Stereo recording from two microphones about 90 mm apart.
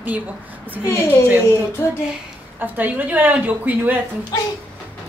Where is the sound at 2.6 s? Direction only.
20° right (ahead or behind).